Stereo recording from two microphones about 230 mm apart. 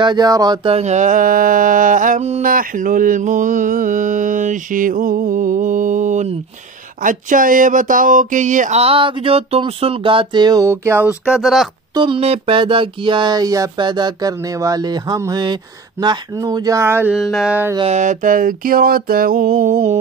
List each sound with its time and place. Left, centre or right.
0.0 s mantra: centre; by 6.3 s right
7.0 s a sound: right; by 11.7 s centre
11.9 s speech: right
17.7 s mantra: right